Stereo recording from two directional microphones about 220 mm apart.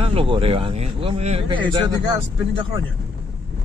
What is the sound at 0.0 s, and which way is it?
Speech, 25° right (ahead or behind).